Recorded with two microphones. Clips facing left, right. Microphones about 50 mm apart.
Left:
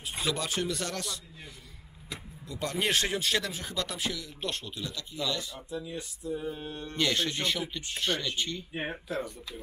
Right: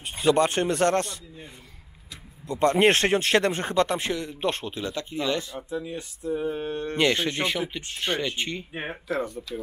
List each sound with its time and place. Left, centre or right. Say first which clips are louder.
0.2 s speech: right 11 dB; right
2.4 s speech: right 12 dB; right
8.7 s speech: right 2 dB; centre